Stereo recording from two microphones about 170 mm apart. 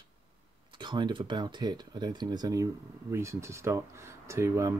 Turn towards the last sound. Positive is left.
turn(degrees=-15)  # may be behind; listen again after turning